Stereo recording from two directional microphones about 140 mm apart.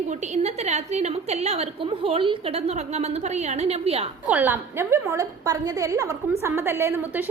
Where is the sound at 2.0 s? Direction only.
40° right (ahead or behind).